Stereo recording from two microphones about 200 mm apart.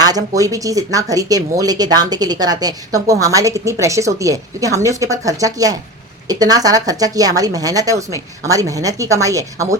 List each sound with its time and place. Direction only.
0.0 s speech: 20° right (ahead or behind)